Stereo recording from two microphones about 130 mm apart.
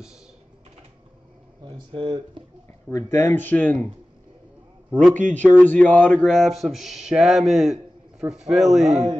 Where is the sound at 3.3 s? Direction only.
10° left (ahead or behind).